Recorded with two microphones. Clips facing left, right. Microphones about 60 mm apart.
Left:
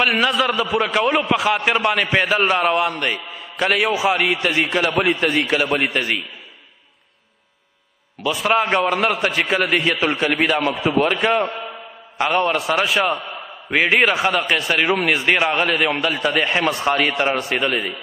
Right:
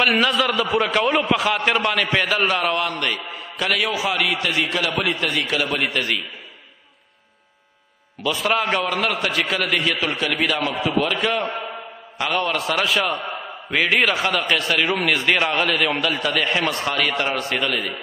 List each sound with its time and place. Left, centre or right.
0.0 s a man's voice: centre; by 6.2 s left
8.2 s a man's voice: centre
8.5 s a man's voice: left
12.5 s a man's voice: centre
16.2 s a man's voice: left